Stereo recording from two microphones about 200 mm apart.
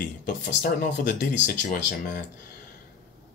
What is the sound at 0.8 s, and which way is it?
Speech, 40° left (ahead or behind).